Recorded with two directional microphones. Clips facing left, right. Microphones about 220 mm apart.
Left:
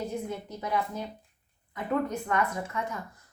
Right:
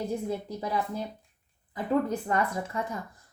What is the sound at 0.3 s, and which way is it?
A woman's voice, 35° right (ahead or behind).